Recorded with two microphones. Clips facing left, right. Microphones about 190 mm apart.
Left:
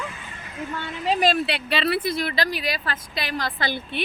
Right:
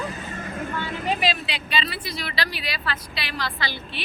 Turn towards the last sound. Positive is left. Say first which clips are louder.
# left 4 dB
turn(degrees=50)  # may be behind; listen again after turning